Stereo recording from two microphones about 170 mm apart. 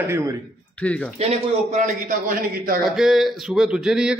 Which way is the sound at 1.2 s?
40° right (ahead or behind).